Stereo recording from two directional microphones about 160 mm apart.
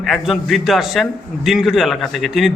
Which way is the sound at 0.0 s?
Centre (ahead or behind).